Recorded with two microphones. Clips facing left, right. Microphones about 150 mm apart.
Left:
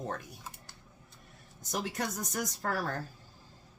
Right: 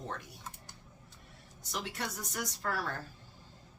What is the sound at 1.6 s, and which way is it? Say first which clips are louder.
A woman's voice: left 4 dB; 45° left (ahead or behind).